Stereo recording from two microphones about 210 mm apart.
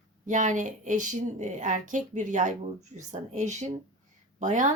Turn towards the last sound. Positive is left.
turn(degrees=-35)  # may be behind; listen again after turning